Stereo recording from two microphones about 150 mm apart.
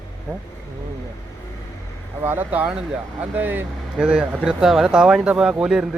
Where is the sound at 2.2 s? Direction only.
10° right (ahead or behind).